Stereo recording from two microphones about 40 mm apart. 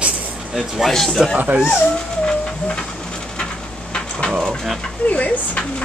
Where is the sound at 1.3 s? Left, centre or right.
Right.